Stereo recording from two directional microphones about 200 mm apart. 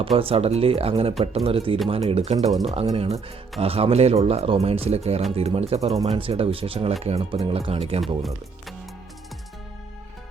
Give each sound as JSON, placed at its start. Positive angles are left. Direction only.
{"t": 0.2, "sound": "speech", "side_deg": -30}
{"t": 2.5, "sound": "speech", "side_deg": 0}
{"t": 2.8, "sound": "speech", "side_deg": -25}
{"t": 7.2, "sound": "speech", "side_deg": -20}
{"t": 7.5, "sound": "speech", "side_deg": -30}
{"t": 8.0, "sound": "speech", "side_deg": 0}